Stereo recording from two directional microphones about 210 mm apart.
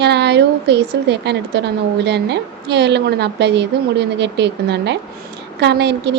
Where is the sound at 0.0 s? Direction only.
55° right (ahead or behind).